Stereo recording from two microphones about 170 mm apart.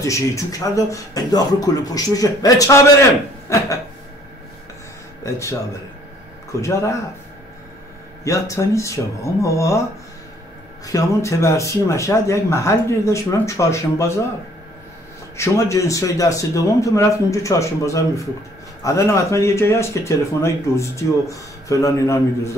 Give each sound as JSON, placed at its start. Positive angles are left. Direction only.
{"t": 0.0, "sound": "speech", "side_deg": 20}
{"t": 5.2, "sound": "speech", "side_deg": 15}
{"t": 6.6, "sound": "speech", "side_deg": 15}
{"t": 8.2, "sound": "speech", "side_deg": 20}
{"t": 10.9, "sound": "speech", "side_deg": 20}
{"t": 15.3, "sound": "speech", "side_deg": 15}